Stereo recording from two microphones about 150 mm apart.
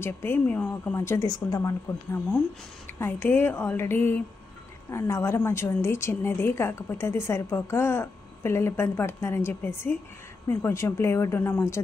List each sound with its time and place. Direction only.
0.0 s a woman's voice: 15° left (ahead or behind)
3.0 s a woman's voice: 15° left (ahead or behind)